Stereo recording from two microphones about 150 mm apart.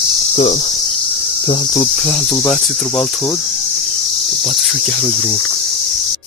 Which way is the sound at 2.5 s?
5° left (ahead or behind).